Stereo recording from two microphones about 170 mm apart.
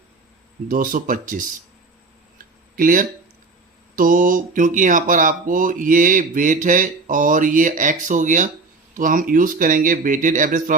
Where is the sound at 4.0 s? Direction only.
50° right (ahead or behind).